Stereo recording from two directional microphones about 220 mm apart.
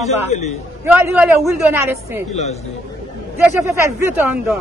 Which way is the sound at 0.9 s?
5° right (ahead or behind).